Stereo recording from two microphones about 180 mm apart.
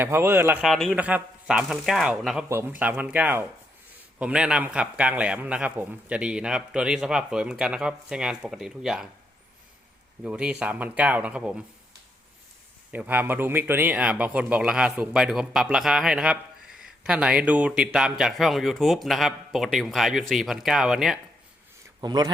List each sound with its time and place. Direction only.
0.0 s speech: 15° right (ahead or behind)
0.6 s a man's voice: centre (ahead or behind)
10.2 s speech: 5° right (ahead or behind)
12.9 s a man's voice: 10° right (ahead or behind)
22.0 s speech: 20° right (ahead or behind)